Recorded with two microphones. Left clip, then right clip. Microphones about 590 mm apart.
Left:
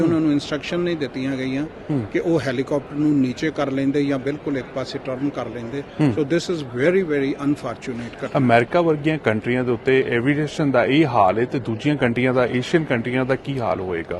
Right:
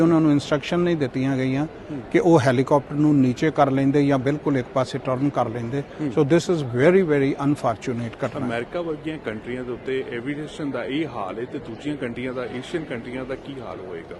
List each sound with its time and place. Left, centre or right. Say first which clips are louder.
0.0 s a man's voice: right 1 dB; right
8.4 s a man's voice: left 10 dB; left